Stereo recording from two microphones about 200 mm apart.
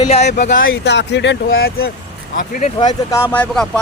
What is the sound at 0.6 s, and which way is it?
Speech, 55° left (ahead or behind).